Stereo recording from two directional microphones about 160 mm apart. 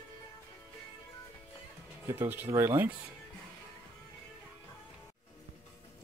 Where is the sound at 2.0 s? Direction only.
15° right (ahead or behind).